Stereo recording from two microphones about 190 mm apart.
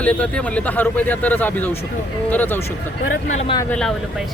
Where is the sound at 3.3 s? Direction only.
35° left (ahead or behind).